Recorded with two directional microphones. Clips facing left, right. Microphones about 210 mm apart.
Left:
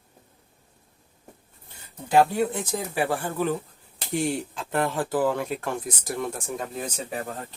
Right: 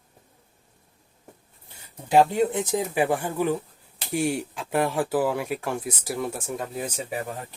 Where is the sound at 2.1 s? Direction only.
20° right (ahead or behind).